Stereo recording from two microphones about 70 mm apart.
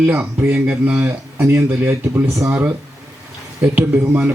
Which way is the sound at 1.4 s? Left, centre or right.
Right.